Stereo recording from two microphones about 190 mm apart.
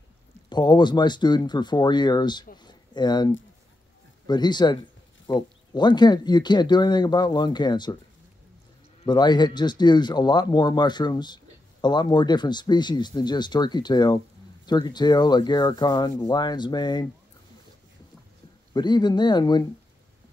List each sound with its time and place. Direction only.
0.5 s speech: 25° left (ahead or behind)
2.5 s a sound: 20° left (ahead or behind)
4.3 s speech: 25° left (ahead or behind)
9.0 s speech: 20° left (ahead or behind)
18.7 s speech: 20° left (ahead or behind)